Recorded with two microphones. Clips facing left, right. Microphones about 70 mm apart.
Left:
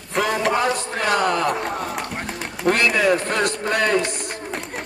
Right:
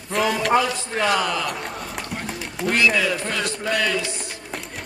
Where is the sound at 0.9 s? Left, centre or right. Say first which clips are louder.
Even; left.